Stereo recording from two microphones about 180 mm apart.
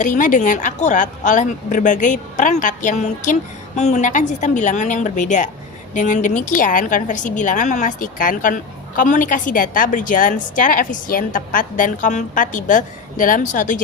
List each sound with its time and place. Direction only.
0.0 s a woman's voice: 45° left (ahead or behind)